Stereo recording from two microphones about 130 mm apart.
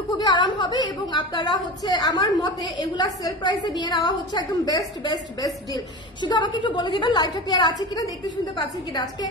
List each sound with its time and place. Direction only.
0.2 s a woman's voice: 40° left (ahead or behind)